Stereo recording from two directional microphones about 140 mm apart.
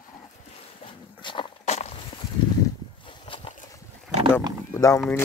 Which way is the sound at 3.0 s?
40° left (ahead or behind).